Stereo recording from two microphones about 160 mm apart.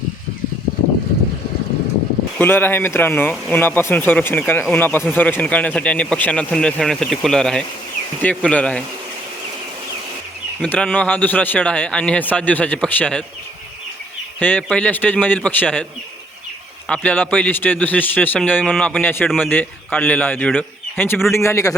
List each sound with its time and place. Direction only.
2.4 s a man's voice: 15° left (ahead or behind)
10.6 s speech: 5° left (ahead or behind)
14.3 s speech: 10° left (ahead or behind)
16.9 s speech: 10° left (ahead or behind)